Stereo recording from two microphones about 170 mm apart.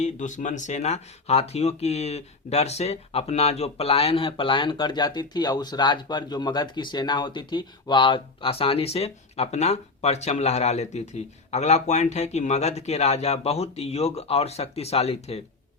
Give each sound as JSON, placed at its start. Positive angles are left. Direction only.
{"t": 0.0, "sound": "speech", "side_deg": 45}